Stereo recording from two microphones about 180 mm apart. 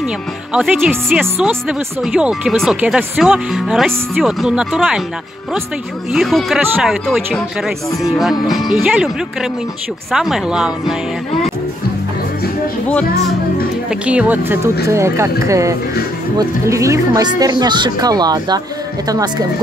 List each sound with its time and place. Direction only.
0.5 s speech: 5° right (ahead or behind)
6.1 s speech: centre (ahead or behind)
13.8 s speech: 5° right (ahead or behind)